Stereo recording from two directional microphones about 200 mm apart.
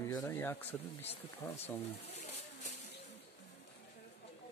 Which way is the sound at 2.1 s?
35° left (ahead or behind).